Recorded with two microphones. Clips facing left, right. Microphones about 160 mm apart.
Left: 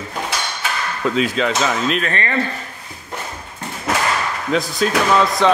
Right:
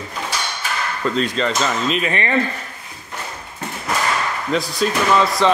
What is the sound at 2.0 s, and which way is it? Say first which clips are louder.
Speech: right 1 dB; 15° right (ahead or behind).